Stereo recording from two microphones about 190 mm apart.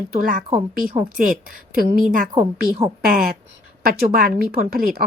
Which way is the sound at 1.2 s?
45° right (ahead or behind).